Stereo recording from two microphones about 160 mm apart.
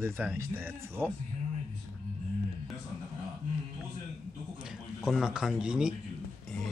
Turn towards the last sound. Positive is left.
turn(degrees=-5)  # may be behind; listen again after turning